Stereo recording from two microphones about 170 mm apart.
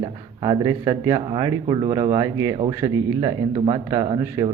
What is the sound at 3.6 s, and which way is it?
Speech, 25° right (ahead or behind).